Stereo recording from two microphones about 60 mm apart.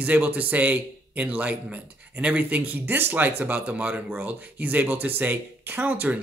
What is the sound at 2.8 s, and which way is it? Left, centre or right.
Speech, right.